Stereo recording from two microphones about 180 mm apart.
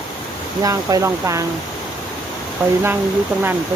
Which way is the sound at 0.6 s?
20° right (ahead or behind).